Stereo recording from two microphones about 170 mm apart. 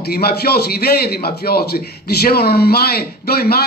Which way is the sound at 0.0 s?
70° left (ahead or behind).